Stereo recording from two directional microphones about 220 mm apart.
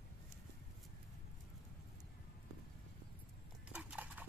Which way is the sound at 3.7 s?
5° right (ahead or behind).